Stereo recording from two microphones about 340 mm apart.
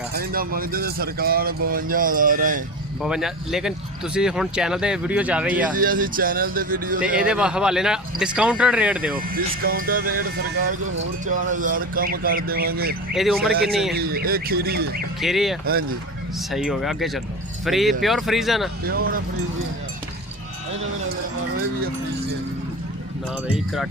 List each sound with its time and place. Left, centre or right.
0.1 s speech: right
3.0 s speech: centre
5.7 s speech: right
7.3 s speech: centre
9.3 s speech: right
13.1 s speech: centre
13.5 s speech: right
15.2 s speech: centre
18.9 s speech: right